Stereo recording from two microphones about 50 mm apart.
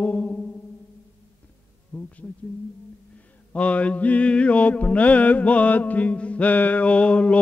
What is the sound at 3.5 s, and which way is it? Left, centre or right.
Music, left.